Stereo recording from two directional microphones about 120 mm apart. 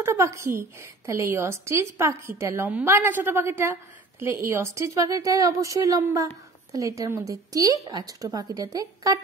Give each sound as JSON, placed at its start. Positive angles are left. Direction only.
{"t": 0.0, "sound": "a woman's voice", "side_deg": -25}